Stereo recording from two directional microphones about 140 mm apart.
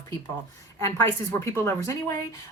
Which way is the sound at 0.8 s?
25° left (ahead or behind).